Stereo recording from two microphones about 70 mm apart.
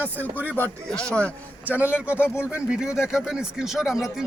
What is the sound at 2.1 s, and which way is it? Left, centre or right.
Speech, left.